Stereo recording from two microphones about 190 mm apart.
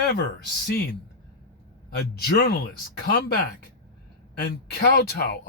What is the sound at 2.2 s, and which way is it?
Speech, 55° left (ahead or behind).